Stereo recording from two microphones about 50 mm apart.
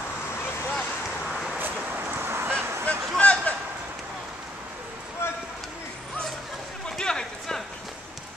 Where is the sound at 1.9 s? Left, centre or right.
Right.